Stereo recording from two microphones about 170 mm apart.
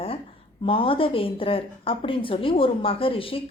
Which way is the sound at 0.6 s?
30° left (ahead or behind).